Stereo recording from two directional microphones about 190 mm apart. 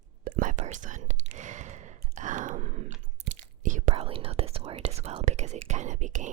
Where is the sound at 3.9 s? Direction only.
30° right (ahead or behind).